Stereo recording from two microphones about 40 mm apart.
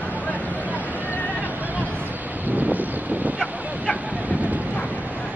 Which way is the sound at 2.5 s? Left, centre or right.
Right.